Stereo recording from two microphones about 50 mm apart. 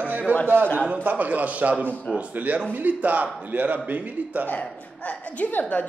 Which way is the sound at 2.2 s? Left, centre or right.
Right.